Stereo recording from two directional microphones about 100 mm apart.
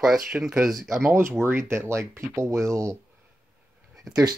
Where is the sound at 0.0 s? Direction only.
5° right (ahead or behind).